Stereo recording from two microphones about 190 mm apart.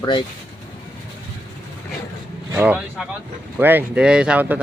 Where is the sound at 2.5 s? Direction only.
5° right (ahead or behind).